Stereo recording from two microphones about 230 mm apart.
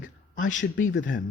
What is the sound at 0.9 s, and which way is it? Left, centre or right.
Speech, left.